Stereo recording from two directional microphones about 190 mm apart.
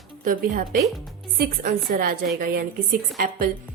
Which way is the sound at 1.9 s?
50° right (ahead or behind).